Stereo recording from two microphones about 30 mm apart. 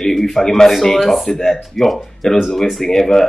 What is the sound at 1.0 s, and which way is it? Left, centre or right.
Speech, centre.